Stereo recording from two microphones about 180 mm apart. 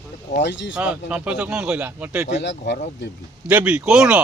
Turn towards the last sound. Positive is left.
turn(degrees=-5)  # may be behind; listen again after turning